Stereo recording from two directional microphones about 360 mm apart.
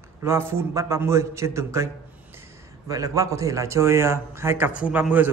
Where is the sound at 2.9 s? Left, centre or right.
Centre.